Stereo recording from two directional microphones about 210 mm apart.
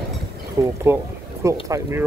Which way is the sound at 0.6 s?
15° right (ahead or behind).